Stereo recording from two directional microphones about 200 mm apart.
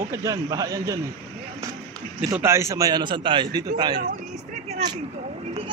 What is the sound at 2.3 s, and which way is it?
A man's voice, 10° right (ahead or behind).